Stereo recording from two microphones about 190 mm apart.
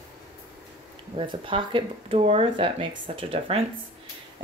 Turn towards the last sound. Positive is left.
turn(degrees=-30)  # may be behind; listen again after turning